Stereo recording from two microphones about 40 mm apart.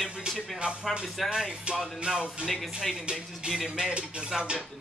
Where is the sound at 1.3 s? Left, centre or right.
Right.